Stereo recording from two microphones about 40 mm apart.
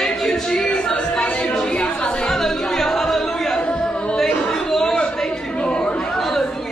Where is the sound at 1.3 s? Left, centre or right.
Left.